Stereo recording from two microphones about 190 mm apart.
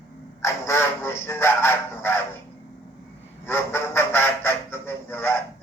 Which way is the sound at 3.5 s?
10° left (ahead or behind).